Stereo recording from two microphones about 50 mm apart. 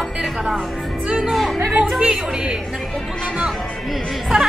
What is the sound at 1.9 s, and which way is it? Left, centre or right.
Speech, centre.